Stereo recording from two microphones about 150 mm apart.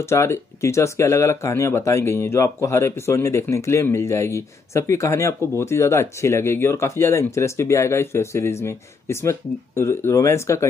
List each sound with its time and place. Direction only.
0.0 s speech: 15° left (ahead or behind)